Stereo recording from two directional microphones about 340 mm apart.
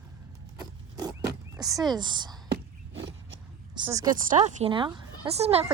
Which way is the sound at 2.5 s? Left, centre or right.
Right.